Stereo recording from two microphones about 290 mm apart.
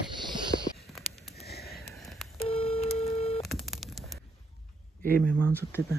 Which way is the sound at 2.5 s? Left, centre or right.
Centre.